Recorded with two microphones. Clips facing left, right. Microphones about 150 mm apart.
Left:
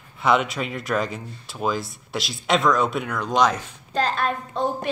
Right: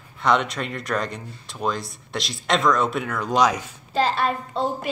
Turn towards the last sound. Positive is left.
turn(degrees=-5)  # may be behind; listen again after turning